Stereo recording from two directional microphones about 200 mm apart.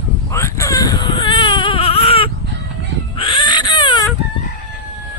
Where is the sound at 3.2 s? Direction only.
25° left (ahead or behind).